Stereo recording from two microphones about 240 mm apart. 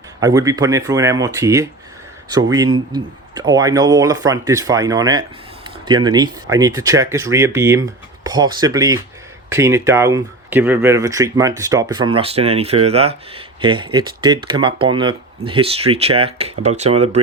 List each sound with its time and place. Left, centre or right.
0.2 s speech: centre